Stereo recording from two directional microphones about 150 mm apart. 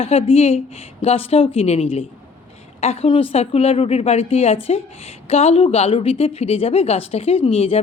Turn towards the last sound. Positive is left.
turn(degrees=40)  # may be behind; listen again after turning